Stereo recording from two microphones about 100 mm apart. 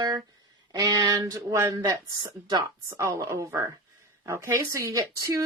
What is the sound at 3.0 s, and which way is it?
Speech, 30° right (ahead or behind).